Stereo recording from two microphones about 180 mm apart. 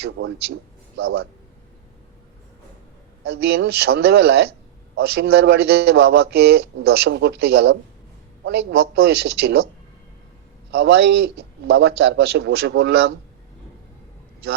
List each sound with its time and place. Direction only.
0.2 s speech: 90° right
0.9 s speech: 65° right (ahead or behind)
3.2 s speech: 65° right (ahead or behind)
10.8 s speech: 70° right (ahead or behind)